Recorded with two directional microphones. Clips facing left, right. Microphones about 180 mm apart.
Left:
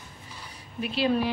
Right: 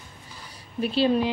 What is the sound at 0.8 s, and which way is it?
Speech, 30° right (ahead or behind).